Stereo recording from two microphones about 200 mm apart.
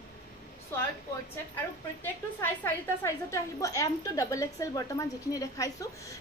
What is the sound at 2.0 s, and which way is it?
A woman's voice, 10° left (ahead or behind).